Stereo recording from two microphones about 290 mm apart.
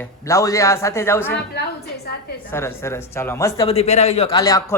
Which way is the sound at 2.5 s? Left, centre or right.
Centre.